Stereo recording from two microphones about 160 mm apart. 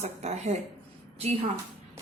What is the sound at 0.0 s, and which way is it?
A woman's voice, 45° right (ahead or behind).